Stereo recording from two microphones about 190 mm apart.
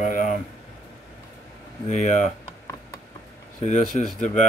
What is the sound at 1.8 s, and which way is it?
Speech, 35° left (ahead or behind).